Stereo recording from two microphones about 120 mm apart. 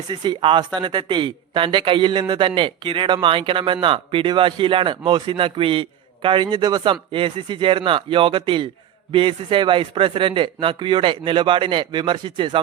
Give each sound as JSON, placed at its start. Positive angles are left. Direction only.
{"t": 0.1, "sound": "speech", "side_deg": -40}